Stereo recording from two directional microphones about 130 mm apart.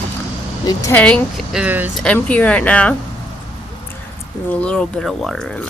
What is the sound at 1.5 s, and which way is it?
Speech, 10° right (ahead or behind).